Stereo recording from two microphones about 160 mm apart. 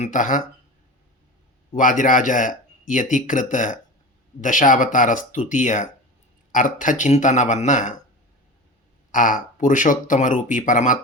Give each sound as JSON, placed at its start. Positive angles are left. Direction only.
{"t": 0.0, "sound": "speech", "side_deg": 55}
{"t": 1.7, "sound": "speech", "side_deg": 55}
{"t": 9.1, "sound": "speech", "side_deg": 55}